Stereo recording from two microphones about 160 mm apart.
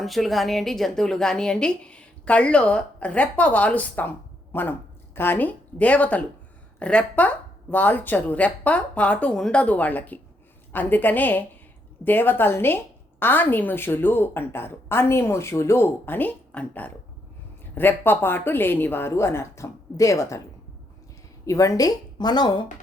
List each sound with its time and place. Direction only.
0.0 s a woman's voice: centre (ahead or behind); by 20.4 s 20° left (ahead or behind)
21.4 s speech: 20° left (ahead or behind)